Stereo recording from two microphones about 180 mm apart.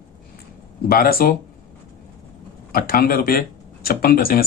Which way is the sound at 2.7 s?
55° left (ahead or behind).